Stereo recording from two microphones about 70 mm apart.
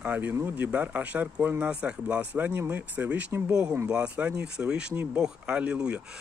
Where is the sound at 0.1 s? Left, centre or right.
Right.